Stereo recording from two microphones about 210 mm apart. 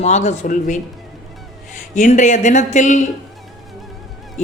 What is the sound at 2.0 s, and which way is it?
Speech, 35° left (ahead or behind).